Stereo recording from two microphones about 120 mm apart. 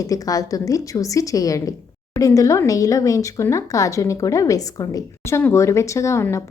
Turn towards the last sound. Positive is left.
turn(degrees=20)  # may be behind; listen again after turning